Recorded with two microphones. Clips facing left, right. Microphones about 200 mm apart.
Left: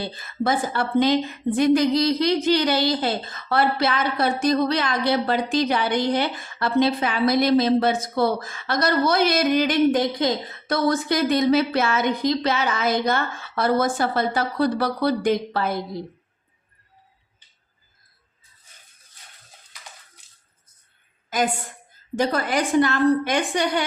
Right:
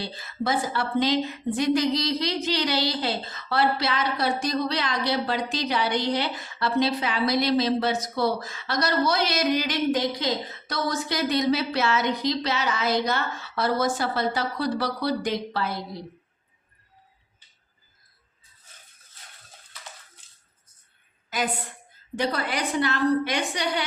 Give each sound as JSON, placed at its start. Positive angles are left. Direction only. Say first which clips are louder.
{"t": 0.0, "sound": "a woman's voice", "louder": "left 4 dB", "side_deg": 50}
{"t": 21.2, "sound": "a sound", "louder": "left 5 dB", "side_deg": 45}
{"t": 22.1, "sound": "a woman's voice", "louder": "left 5 dB", "side_deg": 45}